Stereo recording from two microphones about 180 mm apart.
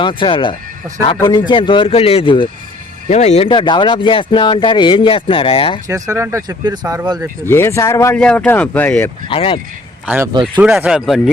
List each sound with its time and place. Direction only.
0.0 s speech: 25° left (ahead or behind)
3.1 s speech: 40° left (ahead or behind)
5.9 s speech: 15° right (ahead or behind)
7.4 s speech: 15° left (ahead or behind)
8.2 s speech: 5° left (ahead or behind)
9.2 s speech: 30° left (ahead or behind)
10.6 s speech: 5° right (ahead or behind)